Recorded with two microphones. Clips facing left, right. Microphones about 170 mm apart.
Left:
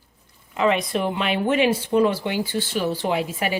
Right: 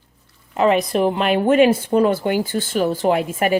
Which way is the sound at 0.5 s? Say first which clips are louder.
Right 5 dB; 45° right (ahead or behind).